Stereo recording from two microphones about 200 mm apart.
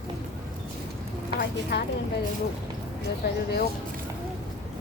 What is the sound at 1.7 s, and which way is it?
Speech, 60° left (ahead or behind).